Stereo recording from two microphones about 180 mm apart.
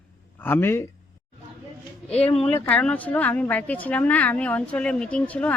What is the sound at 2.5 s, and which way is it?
A man's voice, 10° left (ahead or behind).